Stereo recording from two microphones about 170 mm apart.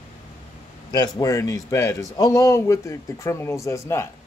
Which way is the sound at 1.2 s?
20° left (ahead or behind).